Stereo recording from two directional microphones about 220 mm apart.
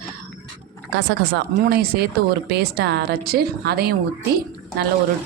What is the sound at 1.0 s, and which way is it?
A woman's voice, 50° right (ahead or behind).